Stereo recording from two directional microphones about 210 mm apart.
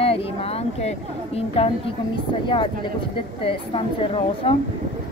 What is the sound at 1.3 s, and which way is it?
Speech, 30° left (ahead or behind).